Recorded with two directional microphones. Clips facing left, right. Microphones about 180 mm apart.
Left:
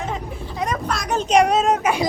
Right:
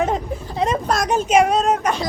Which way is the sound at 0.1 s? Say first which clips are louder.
Right 5 dB; 35° right (ahead or behind).